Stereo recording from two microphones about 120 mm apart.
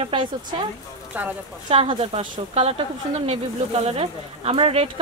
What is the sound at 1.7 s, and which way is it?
A woman's voice, 50° right (ahead or behind).